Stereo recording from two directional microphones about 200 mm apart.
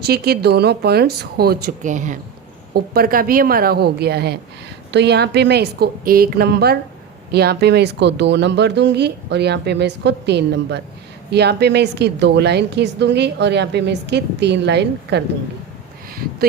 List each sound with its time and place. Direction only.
0.0 s a woman's voice: 50° right (ahead or behind)
1.9 s speech: 40° right (ahead or behind)
2.7 s a woman's voice: 50° right (ahead or behind)